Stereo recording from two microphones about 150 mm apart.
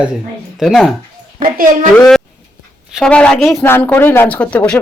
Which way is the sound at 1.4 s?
65° right (ahead or behind).